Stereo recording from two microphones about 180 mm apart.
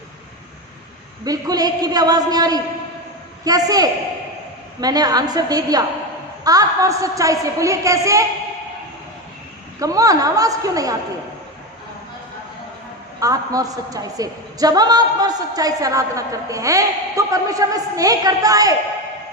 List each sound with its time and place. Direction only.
1.2 s a woman's voice: 20° right (ahead or behind)
9.8 s a woman's voice: 20° right (ahead or behind)
13.1 s a woman's voice: 20° right (ahead or behind)